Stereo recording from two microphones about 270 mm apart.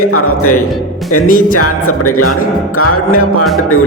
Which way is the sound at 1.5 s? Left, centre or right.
Left.